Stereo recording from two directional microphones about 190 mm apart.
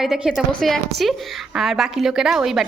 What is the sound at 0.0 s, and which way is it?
A woman's voice, centre (ahead or behind).